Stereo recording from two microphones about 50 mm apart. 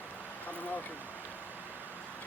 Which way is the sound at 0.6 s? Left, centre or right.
Left.